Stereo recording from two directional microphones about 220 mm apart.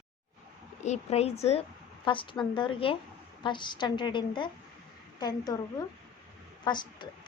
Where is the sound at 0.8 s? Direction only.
30° left (ahead or behind).